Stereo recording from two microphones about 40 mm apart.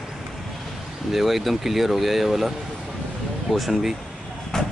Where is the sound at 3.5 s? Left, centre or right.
Centre.